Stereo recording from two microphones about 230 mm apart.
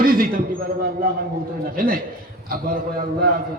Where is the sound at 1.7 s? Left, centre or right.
Right.